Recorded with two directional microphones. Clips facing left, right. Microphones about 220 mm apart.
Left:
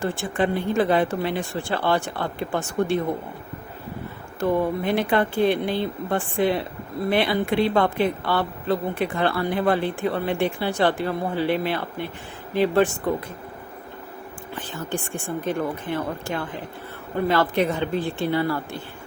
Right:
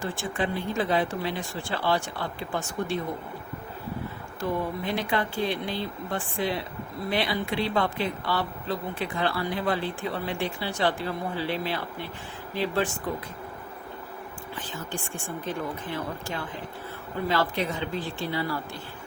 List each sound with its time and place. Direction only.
0.0 s speech: 55° left (ahead or behind)
4.4 s speech: 60° left (ahead or behind)
15.5 s speech: 55° left (ahead or behind)
17.2 s speech: 55° left (ahead or behind)